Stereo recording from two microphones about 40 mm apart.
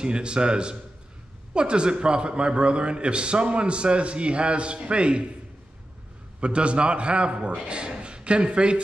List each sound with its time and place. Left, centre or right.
0.0 s a man's voice: right
6.4 s a man's voice: right